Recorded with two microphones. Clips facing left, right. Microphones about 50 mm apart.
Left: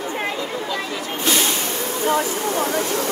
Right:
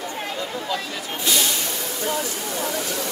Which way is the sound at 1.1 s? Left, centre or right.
Left.